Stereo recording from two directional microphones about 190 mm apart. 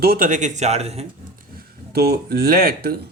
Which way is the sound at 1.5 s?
55° right (ahead or behind).